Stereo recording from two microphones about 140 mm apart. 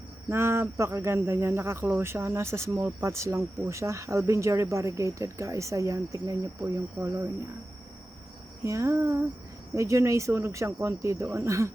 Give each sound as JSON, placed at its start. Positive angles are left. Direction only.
{"t": 0.3, "sound": "speech", "side_deg": -20}
{"t": 8.6, "sound": "speech", "side_deg": -20}